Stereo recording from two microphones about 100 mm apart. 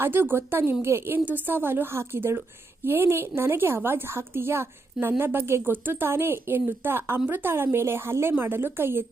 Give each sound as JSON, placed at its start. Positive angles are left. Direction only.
{"t": 0.0, "sound": "a woman's voice", "side_deg": -20}